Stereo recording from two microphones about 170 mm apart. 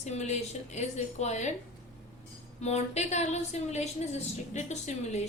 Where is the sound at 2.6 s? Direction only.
40° left (ahead or behind).